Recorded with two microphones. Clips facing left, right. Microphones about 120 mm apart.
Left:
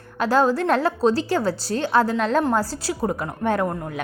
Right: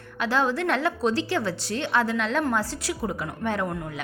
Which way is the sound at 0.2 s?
40° left (ahead or behind).